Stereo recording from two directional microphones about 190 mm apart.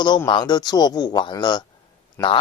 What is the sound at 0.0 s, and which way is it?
Speech, 25° left (ahead or behind).